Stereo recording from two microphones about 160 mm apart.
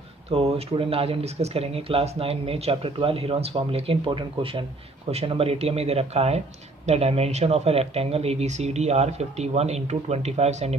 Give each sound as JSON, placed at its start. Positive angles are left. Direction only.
{"t": 0.3, "sound": "speech", "side_deg": -40}